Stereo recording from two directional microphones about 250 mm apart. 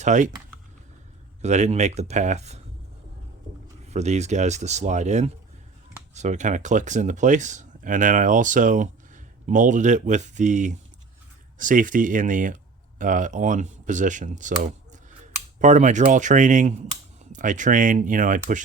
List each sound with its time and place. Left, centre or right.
0.0 s speech: right
1.4 s speech: right
3.8 s speech: right